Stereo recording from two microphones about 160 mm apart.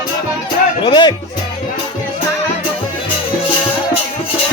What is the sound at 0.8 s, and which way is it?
Music, 30° left (ahead or behind).